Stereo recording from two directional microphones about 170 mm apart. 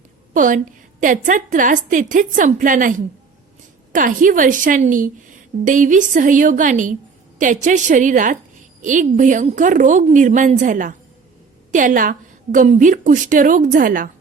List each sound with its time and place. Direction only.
0.3 s a woman's voice: 50° right (ahead or behind)